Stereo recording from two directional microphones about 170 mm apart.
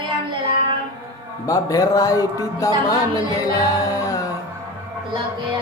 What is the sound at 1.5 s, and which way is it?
Music, 20° left (ahead or behind).